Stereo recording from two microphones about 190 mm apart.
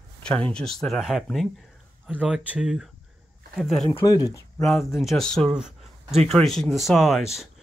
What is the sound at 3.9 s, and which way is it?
Speech, 20° left (ahead or behind).